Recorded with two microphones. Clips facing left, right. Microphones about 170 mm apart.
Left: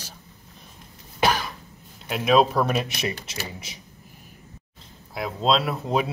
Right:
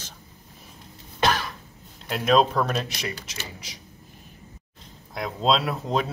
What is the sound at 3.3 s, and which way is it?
Speech, 25° left (ahead or behind).